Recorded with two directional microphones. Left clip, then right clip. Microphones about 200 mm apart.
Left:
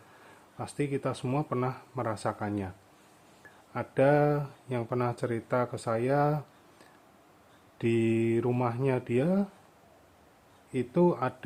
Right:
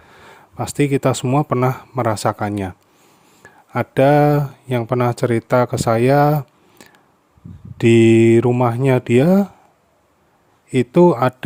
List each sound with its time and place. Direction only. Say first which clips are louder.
0.3 s speech: right 14 dB; 50° right (ahead or behind)
7.8 s speech: right 16 dB; 55° right (ahead or behind)
10.7 s speech: right 14 dB; 55° right (ahead or behind)